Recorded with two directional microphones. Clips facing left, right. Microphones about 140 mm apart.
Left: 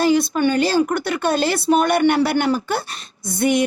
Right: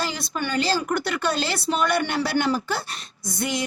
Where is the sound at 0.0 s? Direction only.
55° left (ahead or behind).